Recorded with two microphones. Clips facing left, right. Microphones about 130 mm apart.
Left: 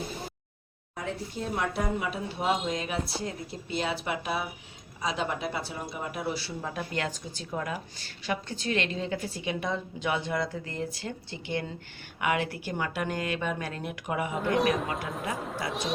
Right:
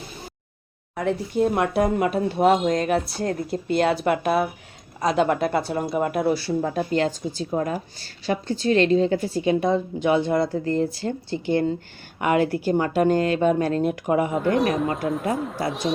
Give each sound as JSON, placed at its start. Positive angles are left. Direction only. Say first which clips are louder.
{"t": 0.9, "sound": "speech", "louder": "right 12 dB", "side_deg": -65}
{"t": 6.7, "sound": "a woman's voice", "louder": "right 10 dB", "side_deg": -30}
{"t": 14.3, "sound": "speech", "louder": "right 5 dB", "side_deg": 0}